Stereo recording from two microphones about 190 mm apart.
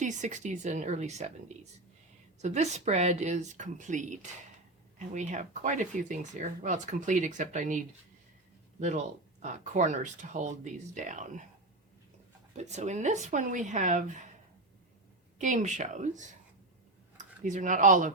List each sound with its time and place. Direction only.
0.0 s speech: 40° right (ahead or behind)
2.4 s speech: 35° right (ahead or behind)
12.5 s speech: 35° right (ahead or behind)
15.4 s speech: 40° right (ahead or behind)